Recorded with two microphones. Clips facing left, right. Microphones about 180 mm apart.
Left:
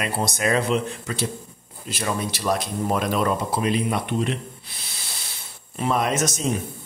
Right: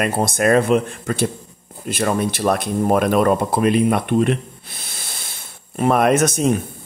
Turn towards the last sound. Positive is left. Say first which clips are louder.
# right 8 dB
turn(degrees=-55)  # may be behind; listen again after turning